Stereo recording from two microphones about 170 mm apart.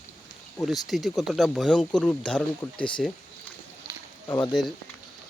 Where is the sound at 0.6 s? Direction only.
Centre (ahead or behind).